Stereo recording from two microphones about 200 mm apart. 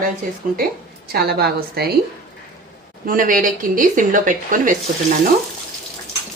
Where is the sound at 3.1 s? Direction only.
45° right (ahead or behind).